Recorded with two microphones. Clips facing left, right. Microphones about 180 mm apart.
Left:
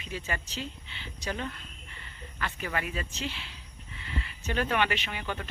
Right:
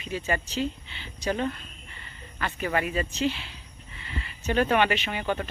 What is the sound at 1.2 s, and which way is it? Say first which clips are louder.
Speech: right 8 dB; 45° right (ahead or behind).